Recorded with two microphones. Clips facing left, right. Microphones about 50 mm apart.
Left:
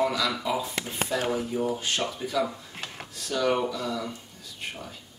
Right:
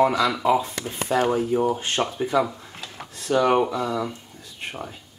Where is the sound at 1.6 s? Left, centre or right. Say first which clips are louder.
Right 5 dB; right.